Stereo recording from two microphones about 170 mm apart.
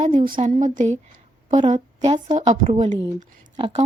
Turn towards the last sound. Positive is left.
turn(degrees=-30)  # may be behind; listen again after turning